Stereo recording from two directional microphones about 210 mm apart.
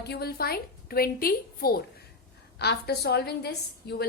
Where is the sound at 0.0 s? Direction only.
50° left (ahead or behind).